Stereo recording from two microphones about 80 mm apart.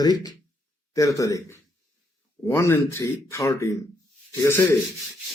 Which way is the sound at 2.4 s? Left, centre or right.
Left.